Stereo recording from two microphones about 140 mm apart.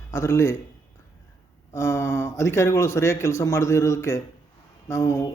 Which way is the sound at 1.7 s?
20° left (ahead or behind).